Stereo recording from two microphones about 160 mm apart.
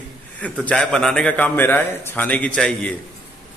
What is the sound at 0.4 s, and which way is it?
A man's voice, 5° left (ahead or behind).